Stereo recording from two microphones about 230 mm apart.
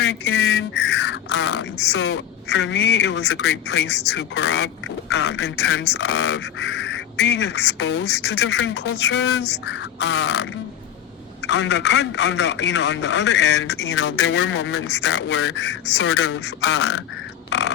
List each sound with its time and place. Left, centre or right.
0.0 s a man's voice: left